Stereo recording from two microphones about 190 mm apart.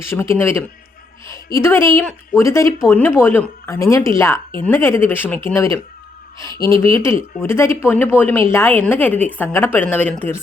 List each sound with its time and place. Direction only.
0.0 s a woman's voice: 15° left (ahead or behind)
6.4 s a woman's voice: 15° left (ahead or behind)